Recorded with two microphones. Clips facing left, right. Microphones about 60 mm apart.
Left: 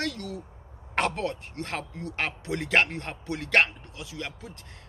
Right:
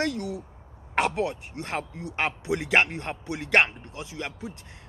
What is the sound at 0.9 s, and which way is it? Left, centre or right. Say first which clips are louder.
Speech: right 2 dB; centre.